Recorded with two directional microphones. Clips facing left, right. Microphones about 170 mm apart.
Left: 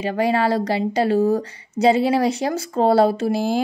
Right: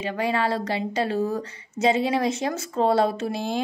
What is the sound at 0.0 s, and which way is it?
A woman's voice, 35° left (ahead or behind).